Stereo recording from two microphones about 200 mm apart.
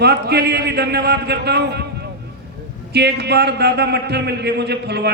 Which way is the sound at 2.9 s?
55° right (ahead or behind).